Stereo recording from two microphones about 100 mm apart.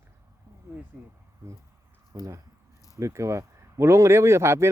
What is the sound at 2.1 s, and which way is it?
Speech, 35° right (ahead or behind).